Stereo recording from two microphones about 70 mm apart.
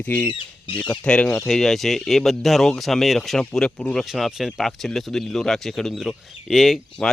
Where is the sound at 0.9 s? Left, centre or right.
Centre.